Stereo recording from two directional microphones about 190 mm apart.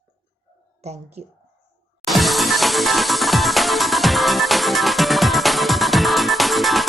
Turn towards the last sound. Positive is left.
turn(degrees=0)  # may be behind; listen again after turning